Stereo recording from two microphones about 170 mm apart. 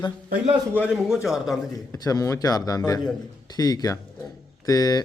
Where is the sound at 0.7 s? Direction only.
5° right (ahead or behind).